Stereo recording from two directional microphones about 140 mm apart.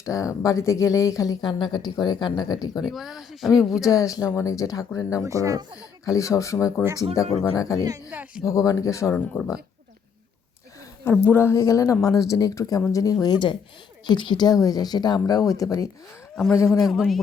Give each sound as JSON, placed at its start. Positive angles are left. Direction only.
{"t": 0.0, "sound": "speech", "side_deg": 25}
{"t": 2.8, "sound": "speech", "side_deg": 0}
{"t": 3.8, "sound": "speech", "side_deg": 25}
{"t": 5.2, "sound": "speech", "side_deg": -20}
{"t": 6.1, "sound": "speech", "side_deg": 20}
{"t": 8.1, "sound": "speech", "side_deg": -10}
{"t": 8.4, "sound": "speech", "side_deg": 25}
{"t": 11.3, "sound": "speech", "side_deg": 20}
{"t": 16.3, "sound": "speech", "side_deg": 5}